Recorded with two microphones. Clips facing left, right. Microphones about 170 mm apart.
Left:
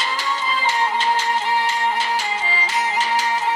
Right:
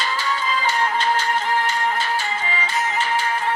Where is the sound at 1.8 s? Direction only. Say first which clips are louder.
Left 1 dB; 20° left (ahead or behind).